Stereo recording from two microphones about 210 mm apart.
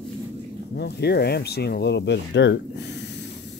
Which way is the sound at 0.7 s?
50° left (ahead or behind).